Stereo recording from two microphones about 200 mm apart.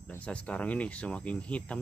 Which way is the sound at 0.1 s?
5° left (ahead or behind).